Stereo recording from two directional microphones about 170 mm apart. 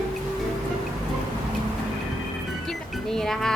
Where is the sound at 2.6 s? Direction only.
Centre (ahead or behind).